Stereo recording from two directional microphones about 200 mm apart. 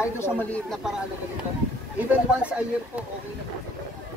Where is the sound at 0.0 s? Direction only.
10° left (ahead or behind).